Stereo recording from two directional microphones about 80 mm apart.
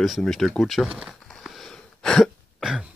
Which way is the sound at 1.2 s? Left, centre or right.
Centre.